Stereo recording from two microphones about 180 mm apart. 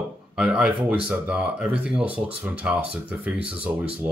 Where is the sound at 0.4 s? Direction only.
5° right (ahead or behind).